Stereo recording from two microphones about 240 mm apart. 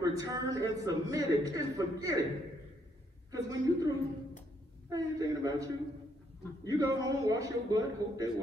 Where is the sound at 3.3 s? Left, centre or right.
Centre.